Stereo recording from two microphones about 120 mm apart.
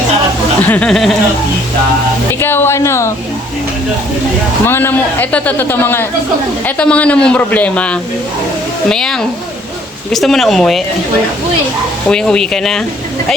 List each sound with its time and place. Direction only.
0.6 s a man's voice: 10° left (ahead or behind)
2.4 s speech: 20° left (ahead or behind)
4.6 s a man's voice: 20° left (ahead or behind); by 10.8 s centre (ahead or behind)
12.0 s speech: 5° left (ahead or behind)